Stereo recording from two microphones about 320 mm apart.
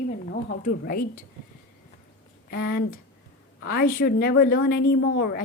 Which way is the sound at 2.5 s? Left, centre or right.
Left.